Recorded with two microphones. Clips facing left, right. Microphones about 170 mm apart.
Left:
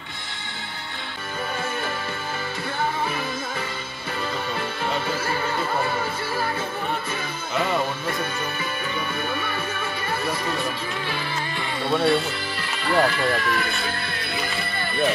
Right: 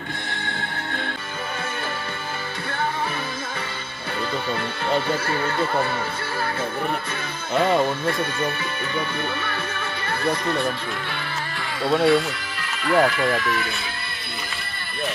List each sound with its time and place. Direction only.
4.9 s speech: centre (ahead or behind)
7.5 s speech: centre (ahead or behind)
10.2 s speech: centre (ahead or behind)
11.8 s speech: centre (ahead or behind)
14.4 s music: centre (ahead or behind)